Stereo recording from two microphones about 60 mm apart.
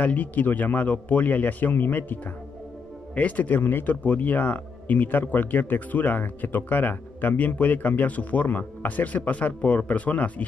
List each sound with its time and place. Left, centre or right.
0.0 s speech: left
3.2 s speech: left